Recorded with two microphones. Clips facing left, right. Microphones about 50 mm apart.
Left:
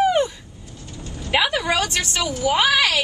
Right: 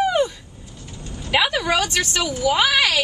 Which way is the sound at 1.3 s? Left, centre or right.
Centre.